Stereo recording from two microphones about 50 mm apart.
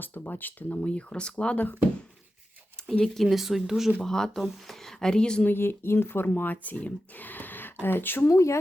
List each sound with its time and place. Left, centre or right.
0.0 s speech: left
0.8 s speech: left
3.0 s speech: centre
4.0 s speech: centre
5.5 s speech: left
8.3 s speech: left